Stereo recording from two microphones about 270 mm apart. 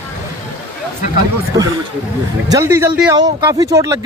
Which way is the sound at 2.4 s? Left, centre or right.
Centre.